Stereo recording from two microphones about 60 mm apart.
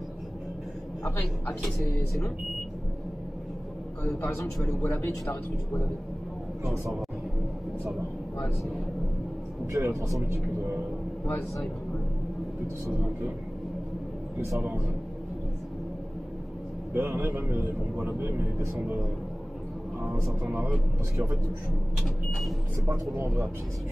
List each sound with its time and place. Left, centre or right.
4.8 s a man's voice: left
9.8 s speech: right
16.9 s a man's voice: right
21.9 s vehicle: centre
22.8 s speech: right